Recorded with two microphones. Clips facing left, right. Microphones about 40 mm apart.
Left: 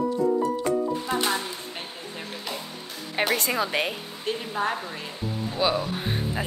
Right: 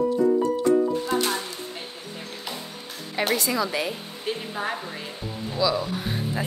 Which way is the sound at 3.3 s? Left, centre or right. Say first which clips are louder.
Right 1 dB; left.